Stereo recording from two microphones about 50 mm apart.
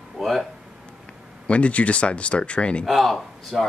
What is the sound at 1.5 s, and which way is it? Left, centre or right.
Speech, left.